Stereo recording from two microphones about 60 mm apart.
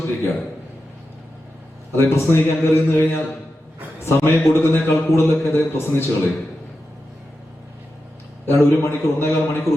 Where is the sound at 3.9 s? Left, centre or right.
Left.